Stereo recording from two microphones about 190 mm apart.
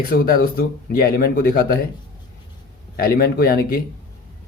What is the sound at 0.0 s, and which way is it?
Speech, 50° left (ahead or behind).